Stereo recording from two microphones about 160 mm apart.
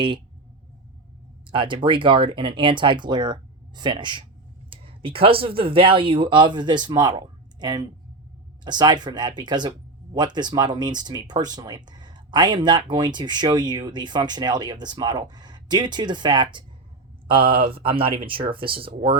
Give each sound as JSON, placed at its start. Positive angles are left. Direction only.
{"t": 1.5, "sound": "speech", "side_deg": -30}